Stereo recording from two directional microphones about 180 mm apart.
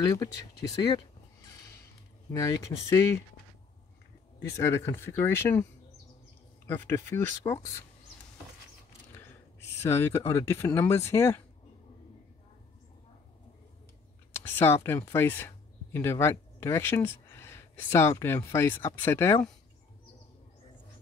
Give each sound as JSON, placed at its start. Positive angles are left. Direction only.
{"t": 0.0, "sound": "speech", "side_deg": 20}
{"t": 2.3, "sound": "speech", "side_deg": 20}
{"t": 4.5, "sound": "speech", "side_deg": 15}
{"t": 6.9, "sound": "speech", "side_deg": 15}
{"t": 9.1, "sound": "speech", "side_deg": 15}
{"t": 14.4, "sound": "speech", "side_deg": 10}